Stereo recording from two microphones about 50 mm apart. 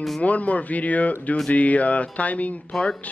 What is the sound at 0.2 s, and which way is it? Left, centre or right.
Speech, left.